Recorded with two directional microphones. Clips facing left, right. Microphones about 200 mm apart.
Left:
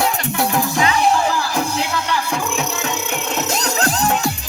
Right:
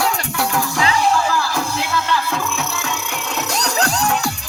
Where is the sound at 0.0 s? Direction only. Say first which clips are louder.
Left 2 dB; 20° left (ahead or behind).